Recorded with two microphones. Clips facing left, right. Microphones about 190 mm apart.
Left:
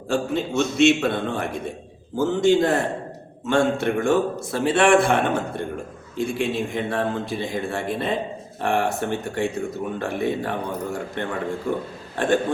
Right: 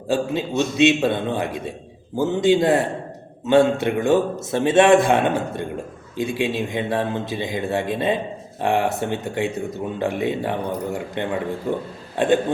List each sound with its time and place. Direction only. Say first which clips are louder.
0.1 s a man's voice: right 1 dB; 15° right (ahead or behind)